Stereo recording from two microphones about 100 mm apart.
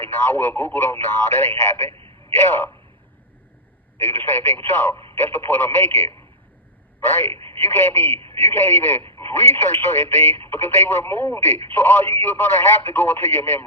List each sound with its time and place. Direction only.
0.0 s speech: 20° left (ahead or behind)
3.9 s speech: 25° left (ahead or behind)